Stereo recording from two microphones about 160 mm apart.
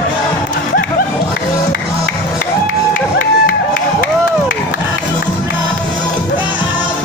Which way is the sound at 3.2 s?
60° left (ahead or behind).